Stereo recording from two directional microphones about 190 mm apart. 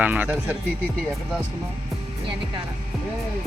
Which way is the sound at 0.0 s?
10° right (ahead or behind).